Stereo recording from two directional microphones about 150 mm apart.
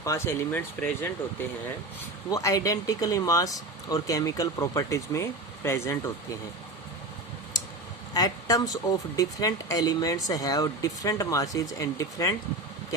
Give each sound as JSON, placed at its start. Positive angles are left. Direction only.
{"t": 0.0, "sound": "speech", "side_deg": 20}
{"t": 2.3, "sound": "speech", "side_deg": 20}
{"t": 8.1, "sound": "speech", "side_deg": 25}